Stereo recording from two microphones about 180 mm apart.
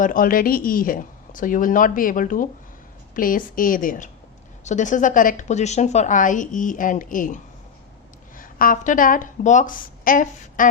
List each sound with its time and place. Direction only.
0.0 s a woman's voice: 50° left (ahead or behind)
8.4 s speech: 50° left (ahead or behind)